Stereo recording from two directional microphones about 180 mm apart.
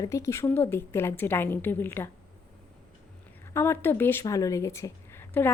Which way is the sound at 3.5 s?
15° left (ahead or behind).